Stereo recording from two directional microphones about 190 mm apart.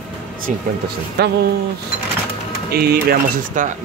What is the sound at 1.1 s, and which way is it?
Speech, 55° right (ahead or behind).